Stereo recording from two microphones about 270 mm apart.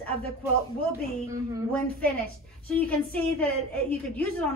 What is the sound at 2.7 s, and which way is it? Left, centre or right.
Speech, centre.